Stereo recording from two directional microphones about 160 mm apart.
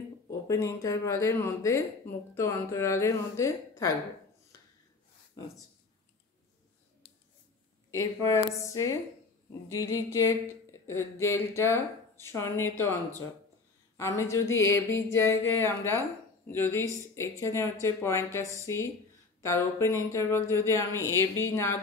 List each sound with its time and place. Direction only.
0.3 s speech: 20° left (ahead or behind)
8.0 s speech: 20° left (ahead or behind)